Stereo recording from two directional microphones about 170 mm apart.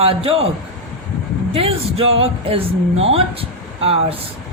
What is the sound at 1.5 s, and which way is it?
Speech, 35° right (ahead or behind).